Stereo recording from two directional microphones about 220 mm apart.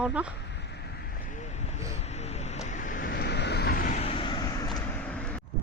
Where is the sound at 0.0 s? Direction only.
5° right (ahead or behind).